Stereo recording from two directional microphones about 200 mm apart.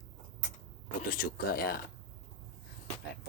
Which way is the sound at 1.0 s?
45° left (ahead or behind).